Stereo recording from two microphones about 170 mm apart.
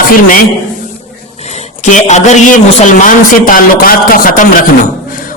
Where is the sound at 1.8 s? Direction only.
45° left (ahead or behind).